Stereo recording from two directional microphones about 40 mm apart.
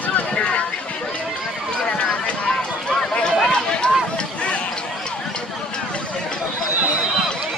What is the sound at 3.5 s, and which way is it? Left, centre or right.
Run, left.